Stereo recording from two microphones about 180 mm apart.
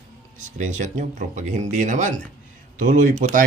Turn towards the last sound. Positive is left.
turn(degrees=-45)  # may be behind; listen again after turning